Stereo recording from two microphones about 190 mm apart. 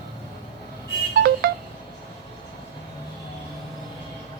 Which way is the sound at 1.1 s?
55° right (ahead or behind).